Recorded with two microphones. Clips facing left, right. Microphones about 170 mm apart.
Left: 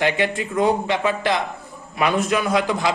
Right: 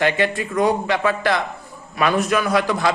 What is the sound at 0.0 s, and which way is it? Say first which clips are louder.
A man's voice: right 1 dB; 15° left (ahead or behind).